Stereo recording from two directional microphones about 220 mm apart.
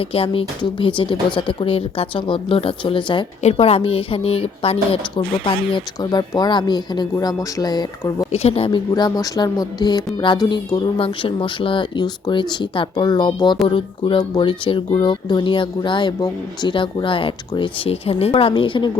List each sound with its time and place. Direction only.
0.0 s speech: 25° left (ahead or behind)
8.3 s speech: 25° left (ahead or behind)